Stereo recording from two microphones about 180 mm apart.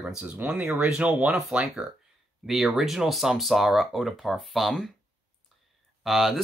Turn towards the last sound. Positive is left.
turn(degrees=0)  # may be behind; listen again after turning